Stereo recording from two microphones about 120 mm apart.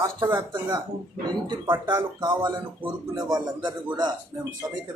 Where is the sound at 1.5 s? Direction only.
40° right (ahead or behind).